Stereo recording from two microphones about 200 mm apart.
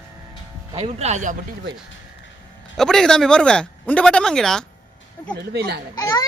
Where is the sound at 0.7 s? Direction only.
30° right (ahead or behind).